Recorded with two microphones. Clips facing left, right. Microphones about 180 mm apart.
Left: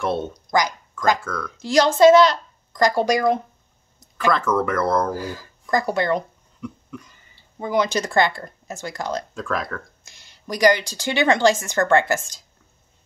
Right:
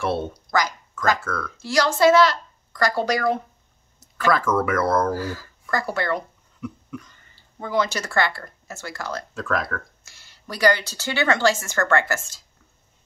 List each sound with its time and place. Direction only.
0.0 s speech: 5° right (ahead or behind)
0.5 s a woman's voice: 15° left (ahead or behind)
4.6 s speech: 5° right (ahead or behind)
5.0 s speech: 15° left (ahead or behind)
6.6 s cough: 5° right (ahead or behind)
7.1 s speech: 15° left (ahead or behind)
9.3 s speech: centre (ahead or behind)
10.0 s a woman's voice: 20° left (ahead or behind)